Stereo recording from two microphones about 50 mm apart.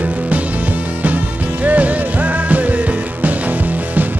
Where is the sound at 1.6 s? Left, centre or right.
Right.